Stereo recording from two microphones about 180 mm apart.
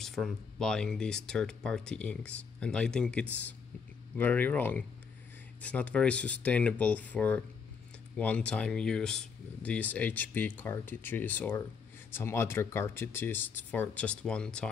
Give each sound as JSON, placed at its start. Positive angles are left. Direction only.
{"t": 0.0, "sound": "speech", "side_deg": 0}